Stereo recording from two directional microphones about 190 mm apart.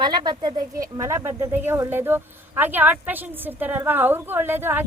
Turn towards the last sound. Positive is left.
turn(degrees=-10)  # may be behind; listen again after turning